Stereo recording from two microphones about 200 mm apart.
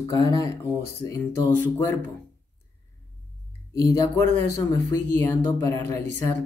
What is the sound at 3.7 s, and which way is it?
Speech, 15° left (ahead or behind).